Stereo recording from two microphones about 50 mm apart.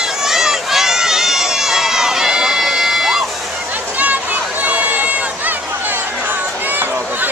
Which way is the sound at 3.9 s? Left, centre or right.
Right.